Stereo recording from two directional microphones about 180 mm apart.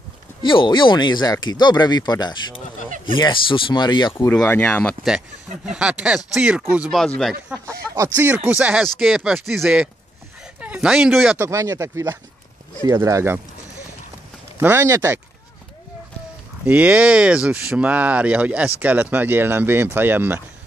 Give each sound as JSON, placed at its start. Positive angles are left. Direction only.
{"t": 0.4, "sound": "speech", "side_deg": 25}
{"t": 4.1, "sound": "speech", "side_deg": 10}
{"t": 5.7, "sound": "speech", "side_deg": -5}
{"t": 11.3, "sound": "speech", "side_deg": -15}
{"t": 14.6, "sound": "speech", "side_deg": -15}
{"t": 16.6, "sound": "speech", "side_deg": -10}